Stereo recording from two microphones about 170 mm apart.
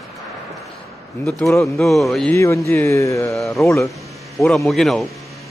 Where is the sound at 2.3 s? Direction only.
15° left (ahead or behind).